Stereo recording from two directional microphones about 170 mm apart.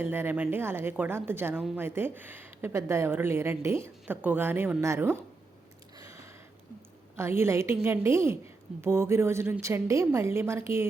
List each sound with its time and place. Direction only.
0.0 s speech: 15° right (ahead or behind)
7.2 s speech: 15° right (ahead or behind)